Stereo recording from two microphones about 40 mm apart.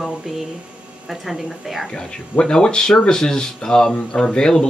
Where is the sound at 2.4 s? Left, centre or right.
Left.